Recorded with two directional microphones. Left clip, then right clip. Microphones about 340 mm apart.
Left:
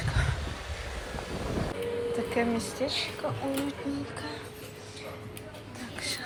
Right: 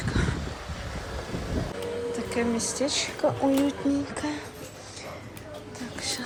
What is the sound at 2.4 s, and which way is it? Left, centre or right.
Speech, centre.